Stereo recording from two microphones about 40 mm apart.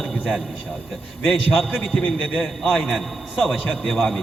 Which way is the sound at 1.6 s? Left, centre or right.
Centre.